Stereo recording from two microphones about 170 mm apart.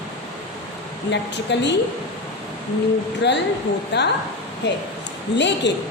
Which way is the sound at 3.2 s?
90° left.